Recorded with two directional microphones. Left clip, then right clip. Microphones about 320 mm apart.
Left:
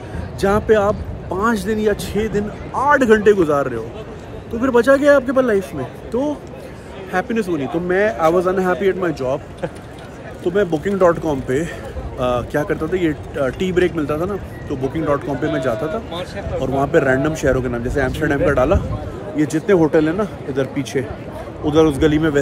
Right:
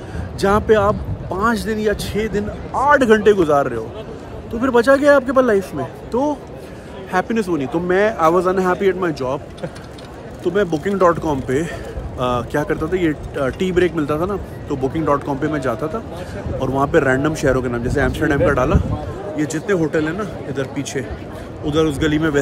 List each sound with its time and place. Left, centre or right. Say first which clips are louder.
0.4 s speech: right 1 dB; centre
10.5 s speech: even; centre
19.3 s speech: left 4 dB; centre
22.1 s speech: left 1 dB; centre